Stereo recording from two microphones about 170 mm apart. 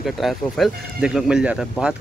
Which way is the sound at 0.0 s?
Centre (ahead or behind).